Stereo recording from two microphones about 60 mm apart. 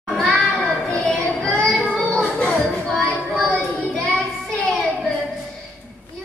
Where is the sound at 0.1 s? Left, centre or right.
Centre.